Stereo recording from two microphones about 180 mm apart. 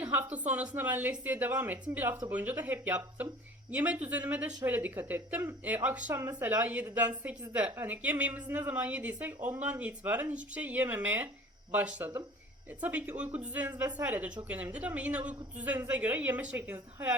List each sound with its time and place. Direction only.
0.3 s speech: 10° right (ahead or behind)